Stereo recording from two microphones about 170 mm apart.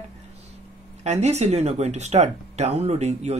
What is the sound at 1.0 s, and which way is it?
Speech, 40° right (ahead or behind).